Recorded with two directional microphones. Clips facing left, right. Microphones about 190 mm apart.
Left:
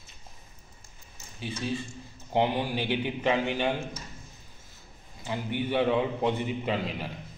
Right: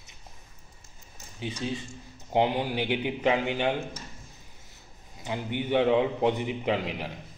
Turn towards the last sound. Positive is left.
turn(degrees=-15)  # may be behind; listen again after turning